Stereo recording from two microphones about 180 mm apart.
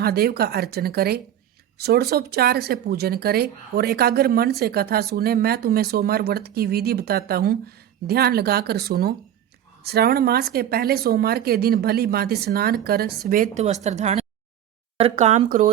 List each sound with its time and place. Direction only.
0.0 s speech: 60° right (ahead or behind); by 15.7 s 40° right (ahead or behind)